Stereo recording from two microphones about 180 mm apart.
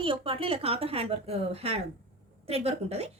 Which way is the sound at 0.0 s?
30° right (ahead or behind).